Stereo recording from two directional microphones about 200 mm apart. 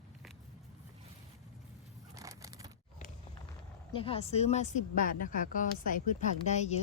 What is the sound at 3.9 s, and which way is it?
A woman's voice, 30° left (ahead or behind).